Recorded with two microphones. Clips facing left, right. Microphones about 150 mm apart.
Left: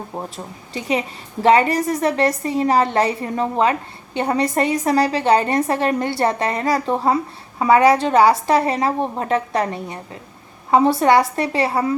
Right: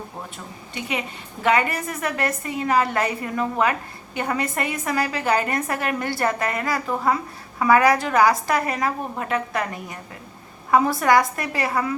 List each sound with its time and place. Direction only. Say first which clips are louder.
0.3 s a woman's voice: left 4 dB; 35° left (ahead or behind)